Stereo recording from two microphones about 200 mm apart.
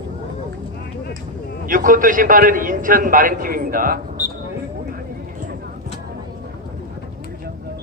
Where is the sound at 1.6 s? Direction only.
45° right (ahead or behind).